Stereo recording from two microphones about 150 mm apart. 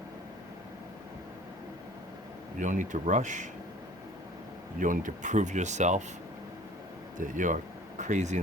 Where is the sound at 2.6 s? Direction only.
55° right (ahead or behind).